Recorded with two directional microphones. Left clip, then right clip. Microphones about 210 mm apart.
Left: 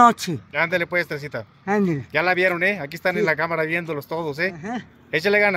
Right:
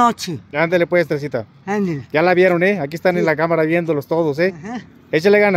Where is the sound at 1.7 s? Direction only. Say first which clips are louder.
Even; centre (ahead or behind).